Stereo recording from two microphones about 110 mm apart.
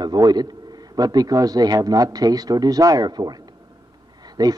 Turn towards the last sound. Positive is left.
turn(degrees=-35)  # may be behind; listen again after turning